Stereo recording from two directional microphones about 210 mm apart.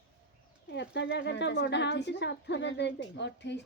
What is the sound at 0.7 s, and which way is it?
Speech, 55° left (ahead or behind).